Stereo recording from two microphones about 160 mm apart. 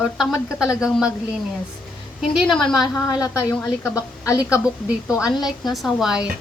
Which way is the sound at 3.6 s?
20° left (ahead or behind).